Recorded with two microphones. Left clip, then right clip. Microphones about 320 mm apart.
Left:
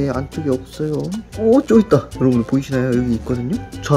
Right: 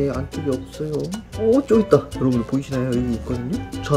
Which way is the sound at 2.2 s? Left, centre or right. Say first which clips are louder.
Left 5 dB; left.